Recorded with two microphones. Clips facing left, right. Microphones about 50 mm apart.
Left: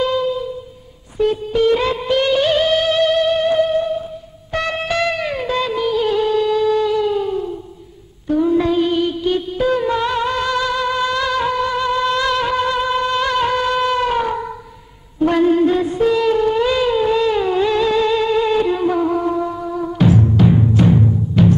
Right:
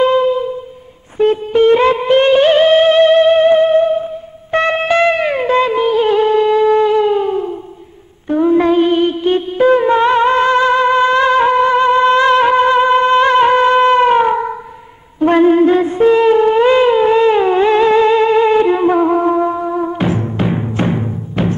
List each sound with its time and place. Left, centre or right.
0.0 s music: right
4.5 s music of bollywood: right
8.3 s music: right
15.1 s a sound: right